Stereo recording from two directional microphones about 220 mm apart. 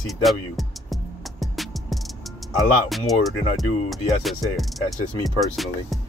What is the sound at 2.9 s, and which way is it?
Speech, centre (ahead or behind).